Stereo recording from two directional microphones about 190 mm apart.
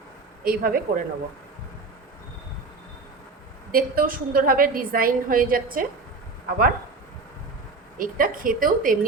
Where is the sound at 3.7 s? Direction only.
50° right (ahead or behind).